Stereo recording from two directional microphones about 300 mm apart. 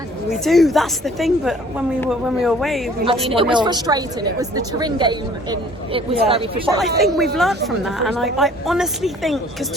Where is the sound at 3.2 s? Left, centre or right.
Centre.